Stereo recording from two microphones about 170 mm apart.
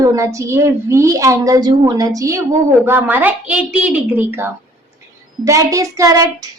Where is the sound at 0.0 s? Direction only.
20° right (ahead or behind).